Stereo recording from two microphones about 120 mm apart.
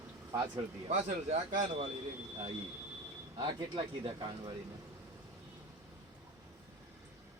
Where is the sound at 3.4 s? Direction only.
35° right (ahead or behind).